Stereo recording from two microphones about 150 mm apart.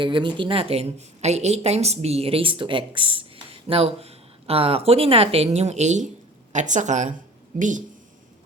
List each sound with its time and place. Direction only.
0.0 s speech: 30° right (ahead or behind); by 7.9 s 55° right (ahead or behind)